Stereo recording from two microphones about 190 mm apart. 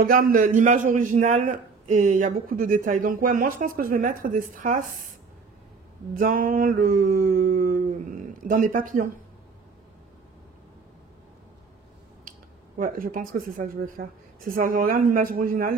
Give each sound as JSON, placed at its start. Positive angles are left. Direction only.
{"t": 0.0, "sound": "a man's voice", "side_deg": -45}
{"t": 6.1, "sound": "a man's voice", "side_deg": -45}
{"t": 12.3, "sound": "speech", "side_deg": -45}